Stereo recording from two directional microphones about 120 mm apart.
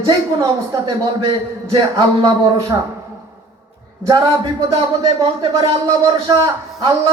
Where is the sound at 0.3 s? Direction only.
35° right (ahead or behind).